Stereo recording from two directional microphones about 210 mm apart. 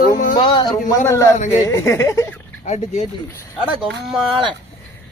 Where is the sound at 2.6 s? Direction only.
30° left (ahead or behind).